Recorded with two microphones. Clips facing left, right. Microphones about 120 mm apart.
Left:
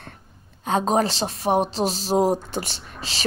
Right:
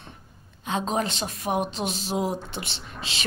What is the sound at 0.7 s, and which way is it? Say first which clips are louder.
Speech: left 6 dB; 40° left (ahead or behind).